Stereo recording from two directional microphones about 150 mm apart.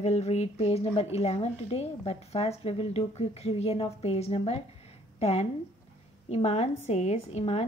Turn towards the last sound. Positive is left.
turn(degrees=45)  # may be behind; listen again after turning